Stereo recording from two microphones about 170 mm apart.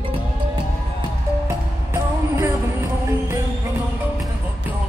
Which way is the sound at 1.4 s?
15° right (ahead or behind).